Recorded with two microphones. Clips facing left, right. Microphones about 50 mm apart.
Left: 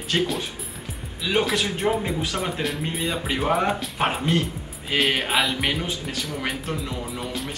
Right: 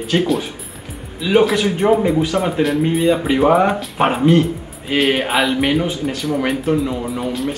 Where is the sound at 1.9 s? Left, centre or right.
Centre.